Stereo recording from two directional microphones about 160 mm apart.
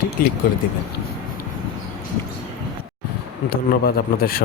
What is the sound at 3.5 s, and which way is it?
Speech, 65° left (ahead or behind).